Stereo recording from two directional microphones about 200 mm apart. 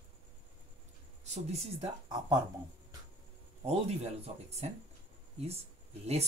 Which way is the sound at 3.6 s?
30° right (ahead or behind).